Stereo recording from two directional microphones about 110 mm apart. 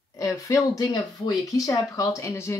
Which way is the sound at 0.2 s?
30° left (ahead or behind).